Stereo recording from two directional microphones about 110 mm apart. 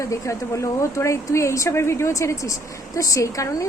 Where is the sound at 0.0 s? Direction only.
30° left (ahead or behind).